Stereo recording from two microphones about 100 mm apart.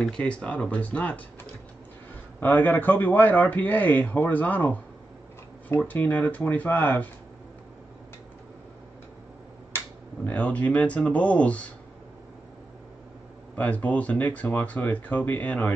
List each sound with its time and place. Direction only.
0.0 s a man's voice: 10° left (ahead or behind)
2.4 s a man's voice: 20° left (ahead or behind)
5.9 s a man's voice: 15° left (ahead or behind)
10.2 s a man's voice: 15° left (ahead or behind)
13.6 s a man's voice: 15° left (ahead or behind)